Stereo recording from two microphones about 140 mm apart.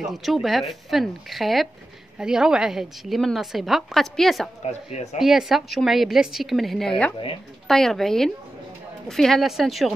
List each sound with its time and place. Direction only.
0.0 s a woman's voice: centre (ahead or behind)
4.6 s speech: 50° left (ahead or behind)
5.2 s a woman's voice: centre (ahead or behind)